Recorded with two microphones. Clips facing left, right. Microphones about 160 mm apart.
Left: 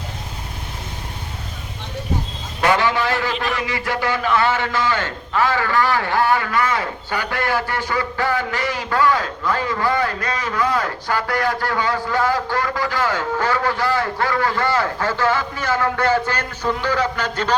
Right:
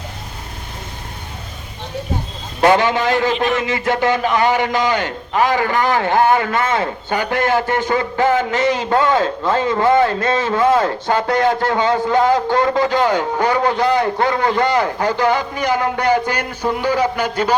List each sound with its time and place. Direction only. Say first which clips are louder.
2.7 s a man's voice: right 4 dB; 20° right (ahead or behind)